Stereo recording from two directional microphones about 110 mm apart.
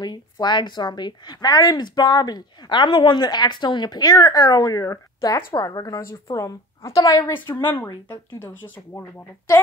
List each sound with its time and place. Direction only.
0.0 s a woman's voice: 40° left (ahead or behind)
8.4 s speech: 20° left (ahead or behind)